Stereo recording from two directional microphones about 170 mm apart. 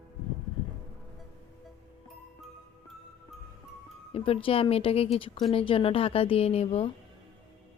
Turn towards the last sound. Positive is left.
turn(degrees=35)  # may be behind; listen again after turning